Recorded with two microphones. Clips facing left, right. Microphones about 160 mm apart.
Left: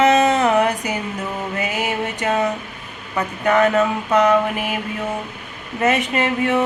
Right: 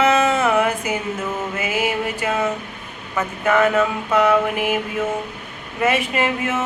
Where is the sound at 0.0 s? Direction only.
40° left (ahead or behind).